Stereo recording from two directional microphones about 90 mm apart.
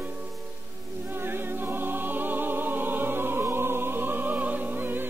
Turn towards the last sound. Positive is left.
turn(degrees=-20)  # may be behind; listen again after turning